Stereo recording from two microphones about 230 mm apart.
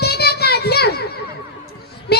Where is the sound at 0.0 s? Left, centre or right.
Left.